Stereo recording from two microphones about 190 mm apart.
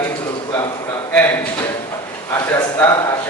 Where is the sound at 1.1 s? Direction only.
10° left (ahead or behind).